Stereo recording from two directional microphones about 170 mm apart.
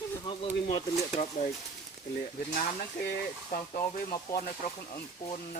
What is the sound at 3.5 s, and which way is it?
Speech, 55° left (ahead or behind).